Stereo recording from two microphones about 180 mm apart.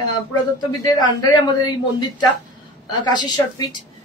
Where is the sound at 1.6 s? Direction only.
20° left (ahead or behind).